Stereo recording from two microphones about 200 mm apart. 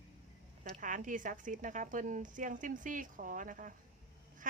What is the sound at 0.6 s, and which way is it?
A woman's voice, 40° right (ahead or behind).